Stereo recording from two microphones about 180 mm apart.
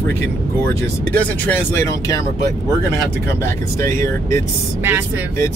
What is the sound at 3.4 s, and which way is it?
Speech, 15° left (ahead or behind).